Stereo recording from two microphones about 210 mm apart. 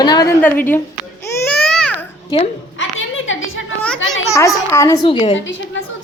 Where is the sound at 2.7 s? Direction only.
65° left (ahead or behind).